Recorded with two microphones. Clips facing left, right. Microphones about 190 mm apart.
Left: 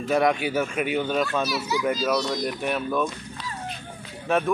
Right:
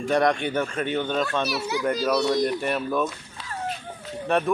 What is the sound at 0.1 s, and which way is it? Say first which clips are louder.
Speech: even; 5° left (ahead or behind).